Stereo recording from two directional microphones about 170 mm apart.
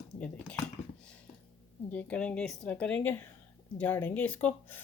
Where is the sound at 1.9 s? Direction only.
10° left (ahead or behind).